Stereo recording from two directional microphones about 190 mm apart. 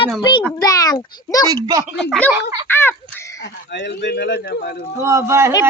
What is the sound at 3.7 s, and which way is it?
Speech, 60° left (ahead or behind).